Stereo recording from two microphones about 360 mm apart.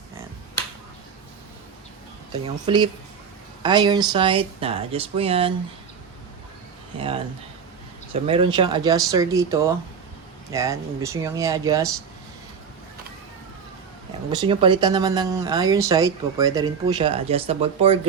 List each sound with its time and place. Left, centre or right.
2.6 s speech: centre
8.1 s speech: centre
14.3 s speech: centre